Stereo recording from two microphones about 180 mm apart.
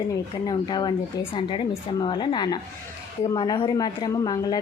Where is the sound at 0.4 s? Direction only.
25° left (ahead or behind).